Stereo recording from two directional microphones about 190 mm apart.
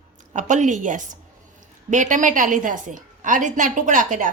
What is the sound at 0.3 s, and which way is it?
A woman's voice, 40° right (ahead or behind).